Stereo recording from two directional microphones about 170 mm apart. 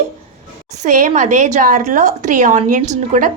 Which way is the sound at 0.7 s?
45° right (ahead or behind).